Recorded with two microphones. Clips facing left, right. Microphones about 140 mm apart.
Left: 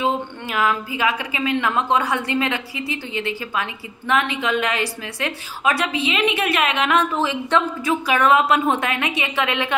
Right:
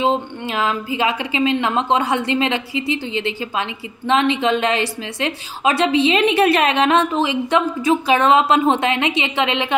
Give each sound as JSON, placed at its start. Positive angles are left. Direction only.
{"t": 0.0, "sound": "a woman's voice", "side_deg": -25}